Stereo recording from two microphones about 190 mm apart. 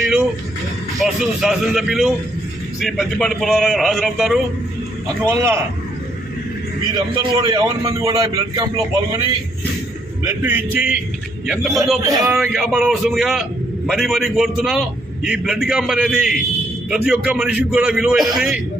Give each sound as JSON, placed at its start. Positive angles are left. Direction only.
{"t": 1.0, "sound": "a man's voice", "side_deg": 0}
{"t": 5.2, "sound": "a man's voice", "side_deg": -15}
{"t": 6.9, "sound": "a man's voice", "side_deg": -20}
{"t": 10.2, "sound": "a man's voice", "side_deg": -10}